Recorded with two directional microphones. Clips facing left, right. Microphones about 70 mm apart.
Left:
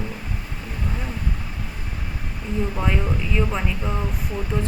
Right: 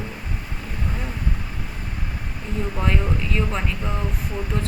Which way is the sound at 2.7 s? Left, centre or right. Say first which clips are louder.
Even; centre.